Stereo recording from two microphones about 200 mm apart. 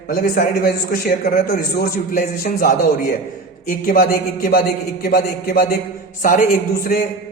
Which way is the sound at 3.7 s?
45° left (ahead or behind).